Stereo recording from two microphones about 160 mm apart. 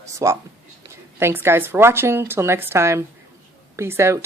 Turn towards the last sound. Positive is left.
turn(degrees=-15)  # may be behind; listen again after turning